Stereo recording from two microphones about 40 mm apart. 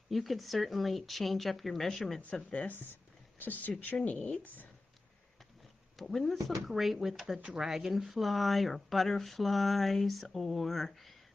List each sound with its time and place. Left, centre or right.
0.1 s speech: centre
3.3 s speech: left
4.1 s a woman's voice: left
5.9 s speech: centre